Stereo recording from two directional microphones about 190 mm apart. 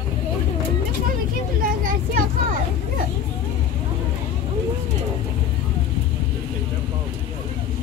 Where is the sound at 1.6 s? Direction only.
50° right (ahead or behind).